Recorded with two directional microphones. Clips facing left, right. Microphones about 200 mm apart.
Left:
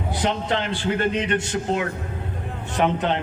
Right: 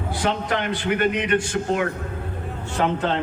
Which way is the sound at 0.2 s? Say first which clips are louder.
Even; 25° left (ahead or behind).